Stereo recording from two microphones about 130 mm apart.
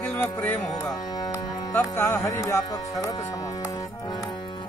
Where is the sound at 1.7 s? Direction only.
15° left (ahead or behind).